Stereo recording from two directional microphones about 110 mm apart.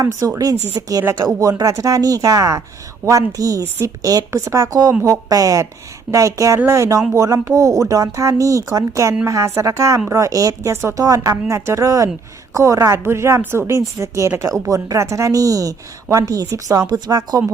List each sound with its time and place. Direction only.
0.0 s a woman's voice: 30° right (ahead or behind)